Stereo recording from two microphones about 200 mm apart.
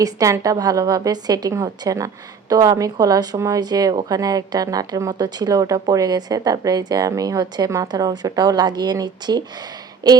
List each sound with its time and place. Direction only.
0.0 s speech: 15° right (ahead or behind)